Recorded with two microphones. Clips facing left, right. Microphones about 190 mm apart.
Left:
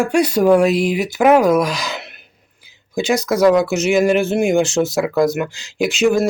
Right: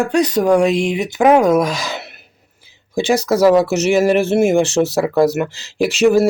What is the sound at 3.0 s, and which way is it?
Speech, 30° right (ahead or behind).